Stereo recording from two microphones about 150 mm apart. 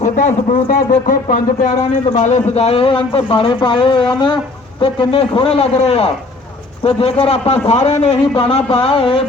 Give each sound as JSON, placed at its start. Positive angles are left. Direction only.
{"t": 0.0, "sound": "speech", "side_deg": 55}
{"t": 2.1, "sound": "a man's voice", "side_deg": 50}